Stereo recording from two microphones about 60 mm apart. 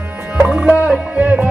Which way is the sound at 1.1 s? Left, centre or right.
Right.